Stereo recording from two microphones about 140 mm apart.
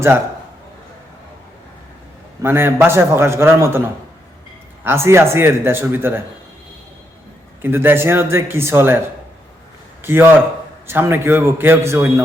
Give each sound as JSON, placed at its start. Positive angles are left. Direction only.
{"t": 2.4, "sound": "a man's voice", "side_deg": -15}
{"t": 7.6, "sound": "a man's voice", "side_deg": -15}
{"t": 10.0, "sound": "a man's voice", "side_deg": -15}